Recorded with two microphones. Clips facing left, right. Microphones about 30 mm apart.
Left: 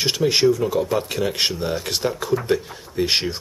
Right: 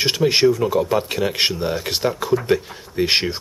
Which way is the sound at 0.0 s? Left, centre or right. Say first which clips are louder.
Right 2 dB; centre.